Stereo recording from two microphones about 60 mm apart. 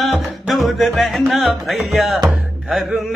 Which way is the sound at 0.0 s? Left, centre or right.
Centre.